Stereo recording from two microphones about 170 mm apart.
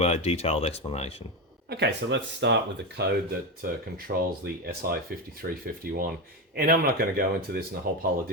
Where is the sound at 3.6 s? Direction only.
60° right (ahead or behind).